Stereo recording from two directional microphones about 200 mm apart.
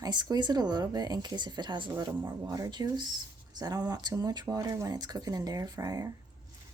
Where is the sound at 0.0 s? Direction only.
20° right (ahead or behind).